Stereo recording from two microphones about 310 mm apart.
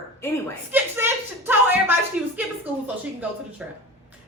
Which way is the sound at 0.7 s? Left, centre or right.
Centre.